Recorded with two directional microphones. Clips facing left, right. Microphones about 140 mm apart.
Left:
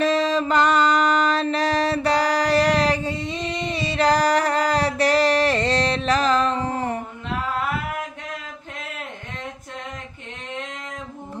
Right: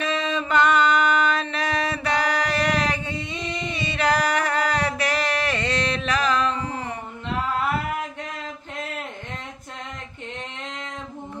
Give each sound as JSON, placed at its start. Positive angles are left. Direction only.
{"t": 0.0, "sound": "mantra", "side_deg": 35}